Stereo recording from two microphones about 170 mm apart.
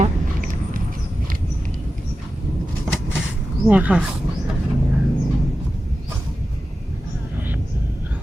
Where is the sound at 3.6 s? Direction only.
10° right (ahead or behind).